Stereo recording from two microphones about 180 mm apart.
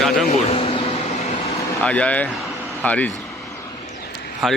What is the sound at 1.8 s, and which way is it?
Speech, 5° left (ahead or behind).